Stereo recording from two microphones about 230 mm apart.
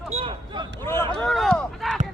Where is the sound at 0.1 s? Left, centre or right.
Right.